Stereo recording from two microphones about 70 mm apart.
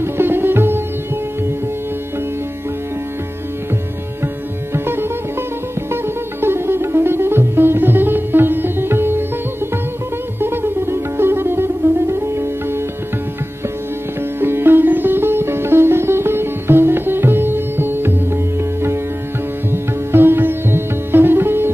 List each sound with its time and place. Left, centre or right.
0.0 s sitar: right
4.7 s music: right
10.4 s music: right
14.4 s sitar: right